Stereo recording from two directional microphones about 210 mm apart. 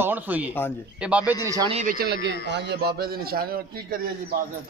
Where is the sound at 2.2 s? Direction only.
55° right (ahead or behind).